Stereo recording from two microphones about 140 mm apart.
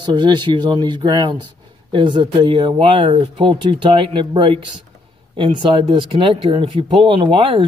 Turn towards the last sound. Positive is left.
turn(degrees=-40)  # may be behind; listen again after turning